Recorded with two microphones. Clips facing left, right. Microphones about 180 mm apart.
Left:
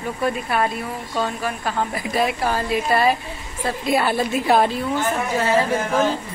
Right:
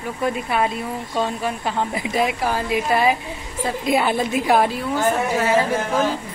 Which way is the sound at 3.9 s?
15° right (ahead or behind).